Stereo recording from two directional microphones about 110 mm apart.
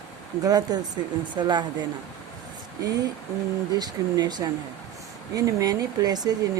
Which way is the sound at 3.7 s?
40° right (ahead or behind).